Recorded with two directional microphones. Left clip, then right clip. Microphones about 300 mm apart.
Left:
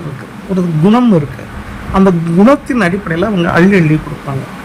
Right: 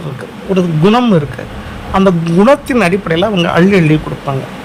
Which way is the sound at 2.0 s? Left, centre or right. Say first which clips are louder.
Even; right.